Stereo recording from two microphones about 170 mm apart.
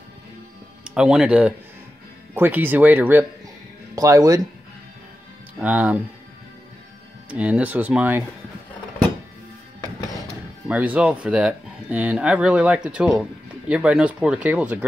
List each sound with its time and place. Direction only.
0.8 s speech: 5° right (ahead or behind)
5.6 s speech: 10° right (ahead or behind)
7.2 s speech: 5° right (ahead or behind)
10.7 s speech: 10° right (ahead or behind)